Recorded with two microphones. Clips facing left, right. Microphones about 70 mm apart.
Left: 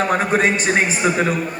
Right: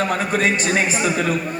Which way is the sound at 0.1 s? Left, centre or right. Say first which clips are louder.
Left 2 dB; left.